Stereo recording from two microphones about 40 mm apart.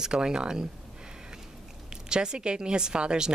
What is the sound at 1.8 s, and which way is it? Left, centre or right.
Speech, right.